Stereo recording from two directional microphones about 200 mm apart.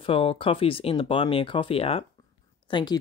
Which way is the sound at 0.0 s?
30° left (ahead or behind).